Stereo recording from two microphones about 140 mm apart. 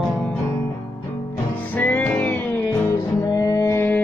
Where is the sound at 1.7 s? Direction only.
10° left (ahead or behind).